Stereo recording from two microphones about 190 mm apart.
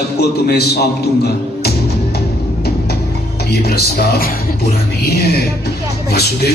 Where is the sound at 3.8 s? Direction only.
55° left (ahead or behind).